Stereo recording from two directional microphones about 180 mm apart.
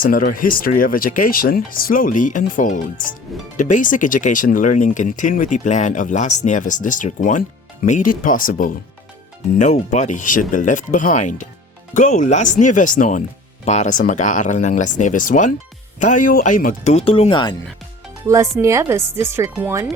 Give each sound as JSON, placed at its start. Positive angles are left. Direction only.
{"t": 0.0, "sound": "speech", "side_deg": 50}
{"t": 18.6, "sound": "speech", "side_deg": -15}